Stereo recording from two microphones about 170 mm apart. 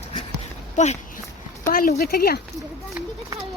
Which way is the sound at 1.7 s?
55° left (ahead or behind).